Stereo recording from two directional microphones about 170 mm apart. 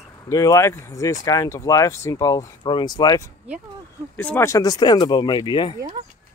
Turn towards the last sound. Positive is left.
turn(degrees=25)  # may be behind; listen again after turning